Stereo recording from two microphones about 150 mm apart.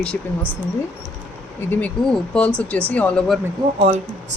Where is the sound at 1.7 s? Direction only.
10° left (ahead or behind).